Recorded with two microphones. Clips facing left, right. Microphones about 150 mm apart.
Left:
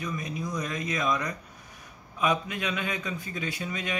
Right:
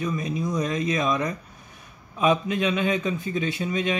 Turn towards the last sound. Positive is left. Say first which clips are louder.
# right 7 dB
turn(degrees=-25)  # may be behind; listen again after turning